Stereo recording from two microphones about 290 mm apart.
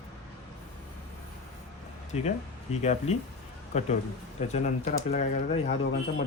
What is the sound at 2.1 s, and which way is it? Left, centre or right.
Speech, left.